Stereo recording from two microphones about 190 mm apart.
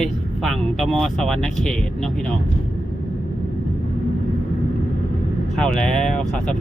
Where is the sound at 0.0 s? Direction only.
Centre (ahead or behind).